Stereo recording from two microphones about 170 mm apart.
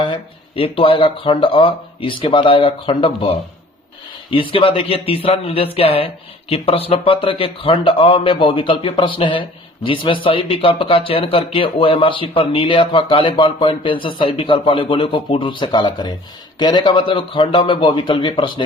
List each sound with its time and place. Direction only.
0.1 s a man's voice: 30° left (ahead or behind)